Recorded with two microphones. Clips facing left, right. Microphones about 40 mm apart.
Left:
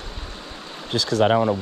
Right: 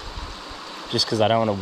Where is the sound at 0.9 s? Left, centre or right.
Left.